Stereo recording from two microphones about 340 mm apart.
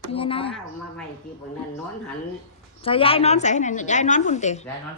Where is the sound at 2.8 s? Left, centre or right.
Centre.